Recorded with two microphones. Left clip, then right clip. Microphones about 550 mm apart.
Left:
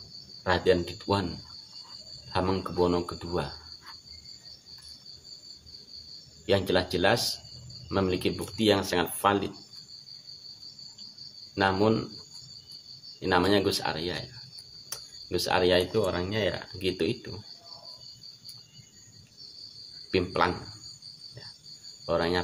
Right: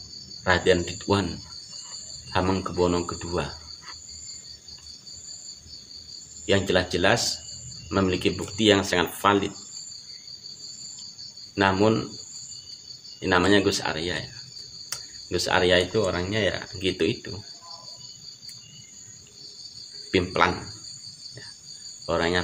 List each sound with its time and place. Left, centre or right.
0.5 s speech: left
2.3 s speech: left
6.4 s speech: left
11.5 s speech: left
13.2 s speech: left
20.1 s speech: left
22.0 s speech: left